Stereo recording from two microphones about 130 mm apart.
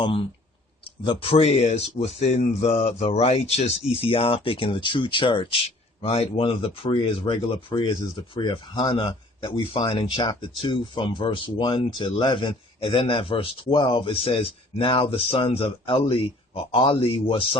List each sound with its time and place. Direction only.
0.0 s speech: 45° left (ahead or behind)